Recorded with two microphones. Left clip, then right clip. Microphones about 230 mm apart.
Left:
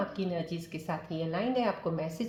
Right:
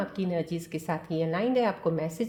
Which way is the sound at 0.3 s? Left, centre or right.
Right.